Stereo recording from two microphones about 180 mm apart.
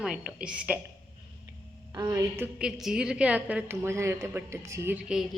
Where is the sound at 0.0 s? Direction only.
5° right (ahead or behind).